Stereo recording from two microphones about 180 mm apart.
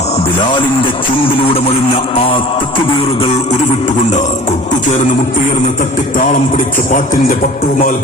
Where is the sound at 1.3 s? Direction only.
30° left (ahead or behind).